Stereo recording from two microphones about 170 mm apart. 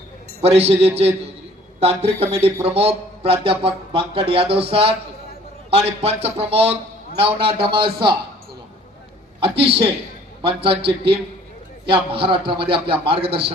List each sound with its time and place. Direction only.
0.4 s a man's voice: 35° right (ahead or behind)
9.4 s a man's voice: 35° right (ahead or behind)